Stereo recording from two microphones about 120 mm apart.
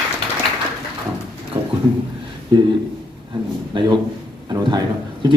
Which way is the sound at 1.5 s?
25° right (ahead or behind).